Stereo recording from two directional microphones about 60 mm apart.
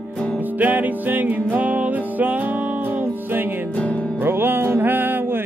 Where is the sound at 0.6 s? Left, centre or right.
Right.